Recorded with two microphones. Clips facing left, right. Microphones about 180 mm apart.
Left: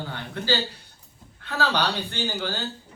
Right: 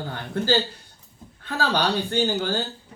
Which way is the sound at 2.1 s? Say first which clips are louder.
Right 6 dB; 45° right (ahead or behind).